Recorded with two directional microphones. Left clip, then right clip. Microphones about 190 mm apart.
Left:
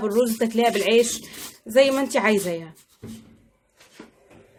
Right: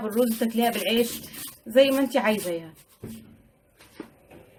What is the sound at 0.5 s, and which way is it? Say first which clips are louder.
Speech: left 6 dB; 55° left (ahead or behind).